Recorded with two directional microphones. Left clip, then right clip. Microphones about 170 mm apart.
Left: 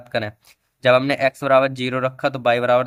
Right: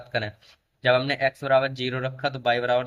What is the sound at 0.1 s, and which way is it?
Speech, 40° left (ahead or behind).